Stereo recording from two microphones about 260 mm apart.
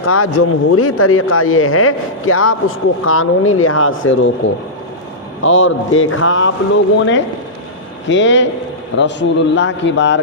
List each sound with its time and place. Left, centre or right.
0.0 s a man's voice: left
8.1 s a man's voice: left